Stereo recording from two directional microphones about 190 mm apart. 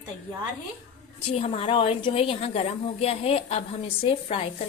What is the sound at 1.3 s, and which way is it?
A woman's voice, 30° left (ahead or behind).